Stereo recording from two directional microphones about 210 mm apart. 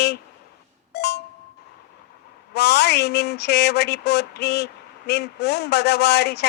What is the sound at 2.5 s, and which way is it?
Speech, 50° left (ahead or behind).